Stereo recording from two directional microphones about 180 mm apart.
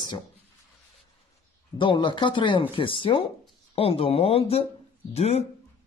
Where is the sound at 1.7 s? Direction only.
30° left (ahead or behind).